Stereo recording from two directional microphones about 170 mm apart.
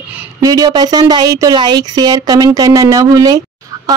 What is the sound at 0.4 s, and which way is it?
A woman's voice, 20° right (ahead or behind).